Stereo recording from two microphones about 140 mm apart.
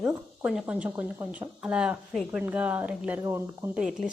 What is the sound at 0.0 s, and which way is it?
Speech, 5° right (ahead or behind).